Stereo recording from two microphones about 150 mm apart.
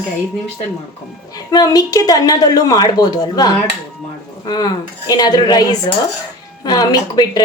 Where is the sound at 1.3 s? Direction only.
25° left (ahead or behind).